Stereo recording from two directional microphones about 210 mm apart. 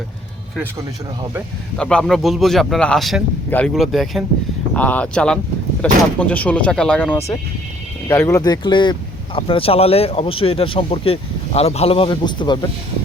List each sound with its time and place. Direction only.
1.8 s a man's voice: 5° left (ahead or behind); by 12.5 s 20° left (ahead or behind)